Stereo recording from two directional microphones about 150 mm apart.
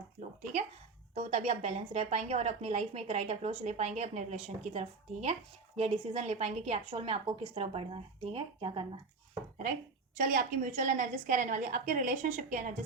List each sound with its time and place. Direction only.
1.1 s a woman's voice: 45° right (ahead or behind)
10.2 s a woman's voice: 65° right (ahead or behind)